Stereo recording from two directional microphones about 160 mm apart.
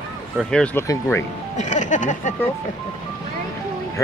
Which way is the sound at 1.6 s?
50° left (ahead or behind).